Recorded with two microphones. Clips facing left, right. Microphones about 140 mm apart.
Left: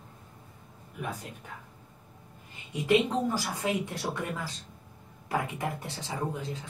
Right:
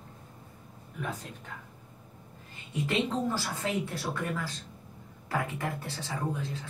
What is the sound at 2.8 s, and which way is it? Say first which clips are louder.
Speech: left 4 dB; 15° left (ahead or behind).